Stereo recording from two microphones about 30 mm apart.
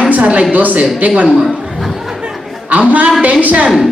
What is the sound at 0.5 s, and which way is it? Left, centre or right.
Speech, right.